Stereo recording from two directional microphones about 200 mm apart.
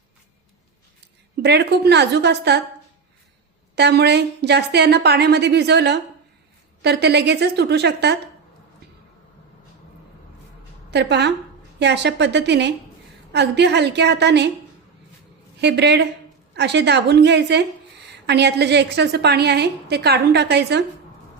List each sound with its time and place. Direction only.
1.0 s a woman's voice: 55° right (ahead or behind)
3.8 s a woman's voice: 55° right (ahead or behind)
10.9 s a woman's voice: 60° right (ahead or behind)
15.6 s a woman's voice: 60° right (ahead or behind)